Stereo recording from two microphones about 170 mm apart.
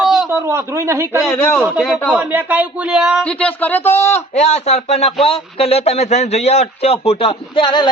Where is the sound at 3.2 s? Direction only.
10° left (ahead or behind).